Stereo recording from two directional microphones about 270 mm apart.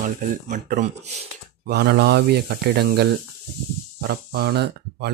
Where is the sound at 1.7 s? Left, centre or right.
Right.